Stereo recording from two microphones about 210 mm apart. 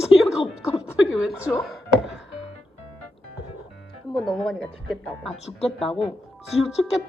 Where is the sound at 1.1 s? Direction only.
5° right (ahead or behind).